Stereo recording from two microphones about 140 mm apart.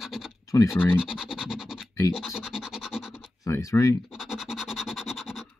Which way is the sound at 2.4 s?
Centre (ahead or behind).